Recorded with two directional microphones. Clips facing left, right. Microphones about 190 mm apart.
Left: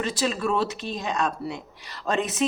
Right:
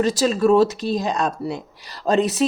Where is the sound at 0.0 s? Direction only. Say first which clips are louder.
Right 8 dB; 40° right (ahead or behind).